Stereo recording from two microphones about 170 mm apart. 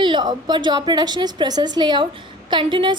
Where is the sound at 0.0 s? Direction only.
25° right (ahead or behind).